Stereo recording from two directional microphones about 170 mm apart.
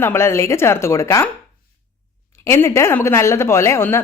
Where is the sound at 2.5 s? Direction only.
15° left (ahead or behind).